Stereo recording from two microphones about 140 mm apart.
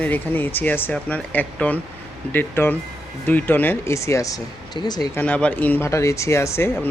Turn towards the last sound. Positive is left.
turn(degrees=20)  # may be behind; listen again after turning